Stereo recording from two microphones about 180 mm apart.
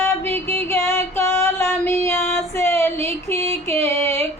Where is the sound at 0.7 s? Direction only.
15° left (ahead or behind).